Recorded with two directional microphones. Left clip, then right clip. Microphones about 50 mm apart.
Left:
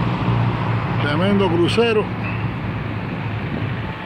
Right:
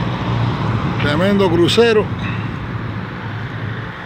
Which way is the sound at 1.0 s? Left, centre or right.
Right.